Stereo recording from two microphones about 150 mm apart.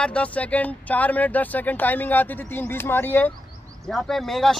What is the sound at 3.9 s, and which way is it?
Speech, centre (ahead or behind).